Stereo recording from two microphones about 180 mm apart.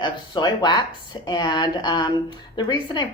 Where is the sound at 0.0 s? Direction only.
25° left (ahead or behind).